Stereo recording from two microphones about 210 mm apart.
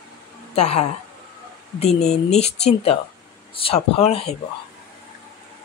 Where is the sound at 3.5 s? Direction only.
25° left (ahead or behind).